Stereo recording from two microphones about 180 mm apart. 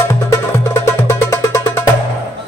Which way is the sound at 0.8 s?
15° left (ahead or behind).